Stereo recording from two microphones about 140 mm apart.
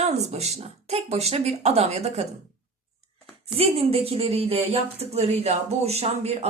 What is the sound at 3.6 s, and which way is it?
A woman's voice, 45° right (ahead or behind).